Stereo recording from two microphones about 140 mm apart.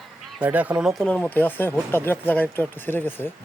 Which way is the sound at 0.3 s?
10° right (ahead or behind).